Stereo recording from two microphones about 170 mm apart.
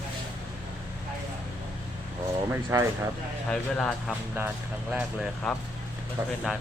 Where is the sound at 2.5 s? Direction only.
15° right (ahead or behind).